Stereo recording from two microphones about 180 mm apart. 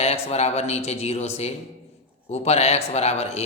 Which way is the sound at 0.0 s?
35° left (ahead or behind).